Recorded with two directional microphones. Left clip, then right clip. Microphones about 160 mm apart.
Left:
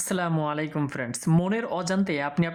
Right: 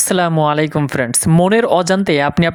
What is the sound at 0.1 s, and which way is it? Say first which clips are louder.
Speech: right 13 dB; 50° right (ahead or behind).